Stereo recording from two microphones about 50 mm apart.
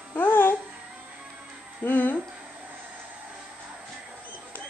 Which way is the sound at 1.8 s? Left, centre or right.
Left.